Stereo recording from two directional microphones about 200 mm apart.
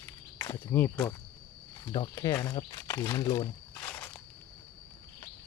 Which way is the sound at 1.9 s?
20° left (ahead or behind).